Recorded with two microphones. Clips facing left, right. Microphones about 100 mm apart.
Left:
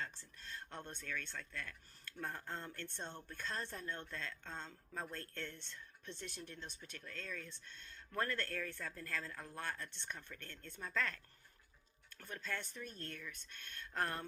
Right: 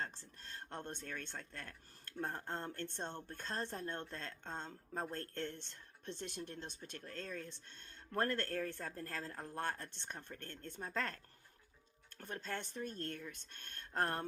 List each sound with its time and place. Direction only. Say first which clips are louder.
0.0 s speech: right 2 dB; 45° right (ahead or behind)